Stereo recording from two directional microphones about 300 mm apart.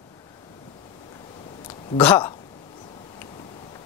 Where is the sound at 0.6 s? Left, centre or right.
Centre.